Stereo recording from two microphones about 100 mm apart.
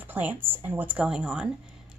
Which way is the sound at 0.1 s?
20° right (ahead or behind).